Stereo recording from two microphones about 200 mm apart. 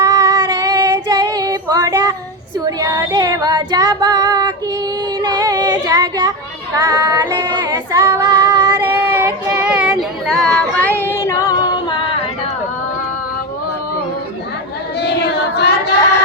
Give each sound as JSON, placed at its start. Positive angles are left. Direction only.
{"t": 0.0, "sound": "child singing", "side_deg": -15}
{"t": 5.2, "sound": "female singing", "side_deg": -20}
{"t": 11.0, "sound": "singing", "side_deg": 15}
{"t": 15.0, "sound": "a sound", "side_deg": 55}